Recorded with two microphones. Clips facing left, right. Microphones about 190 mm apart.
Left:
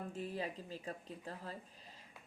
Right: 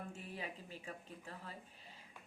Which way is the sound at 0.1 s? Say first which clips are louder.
Left 6 dB; 35° left (ahead or behind).